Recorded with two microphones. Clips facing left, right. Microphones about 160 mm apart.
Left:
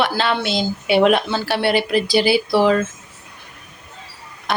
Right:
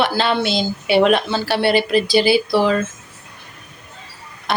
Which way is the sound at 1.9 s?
25° right (ahead or behind).